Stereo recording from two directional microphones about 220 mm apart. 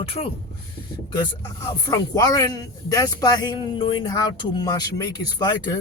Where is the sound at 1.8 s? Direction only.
15° left (ahead or behind).